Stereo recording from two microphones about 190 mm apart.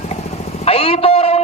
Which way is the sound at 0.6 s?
30° left (ahead or behind).